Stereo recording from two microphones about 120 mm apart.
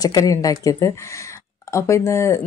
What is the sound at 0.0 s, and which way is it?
A woman's voice, 30° left (ahead or behind).